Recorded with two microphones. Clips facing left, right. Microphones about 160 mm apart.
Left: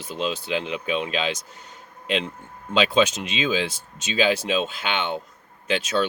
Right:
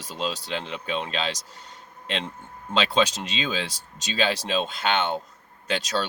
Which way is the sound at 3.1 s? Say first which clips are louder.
Left 3 dB; 35° right (ahead or behind).